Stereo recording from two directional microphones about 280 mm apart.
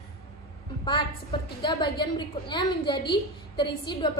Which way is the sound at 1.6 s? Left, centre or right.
Centre.